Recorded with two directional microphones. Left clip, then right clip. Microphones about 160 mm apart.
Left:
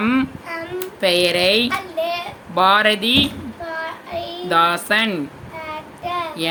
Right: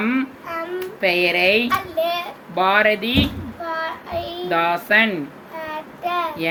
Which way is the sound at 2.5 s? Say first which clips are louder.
Left 2 dB; 35° left (ahead or behind).